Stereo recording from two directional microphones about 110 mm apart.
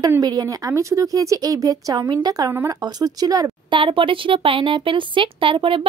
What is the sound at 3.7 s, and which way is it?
Speech, 50° right (ahead or behind).